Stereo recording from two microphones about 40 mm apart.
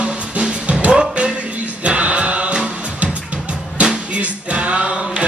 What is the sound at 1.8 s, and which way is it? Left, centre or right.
Music, right.